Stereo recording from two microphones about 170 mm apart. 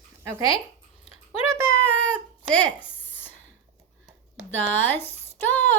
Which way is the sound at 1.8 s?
5° left (ahead or behind).